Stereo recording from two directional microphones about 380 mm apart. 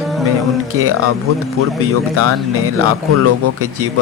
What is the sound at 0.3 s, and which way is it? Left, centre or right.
Speech, right.